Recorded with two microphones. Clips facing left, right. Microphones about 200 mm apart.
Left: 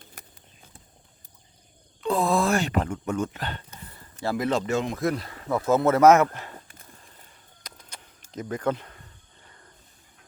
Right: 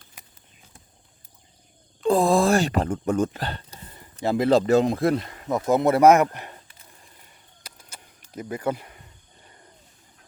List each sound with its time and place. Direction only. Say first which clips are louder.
2.0 s speech: right 4 dB; 30° right (ahead or behind)
3.9 s a sound: right 4 dB; 20° right (ahead or behind)
4.4 s speech: right 9 dB; 35° right (ahead or behind)
5.5 s speech: right 1 dB; 15° right (ahead or behind)
7.6 s a sound: even; 10° right (ahead or behind)
8.3 s speech: even; 10° right (ahead or behind)